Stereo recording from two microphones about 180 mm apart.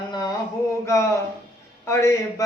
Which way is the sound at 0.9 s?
15° left (ahead or behind).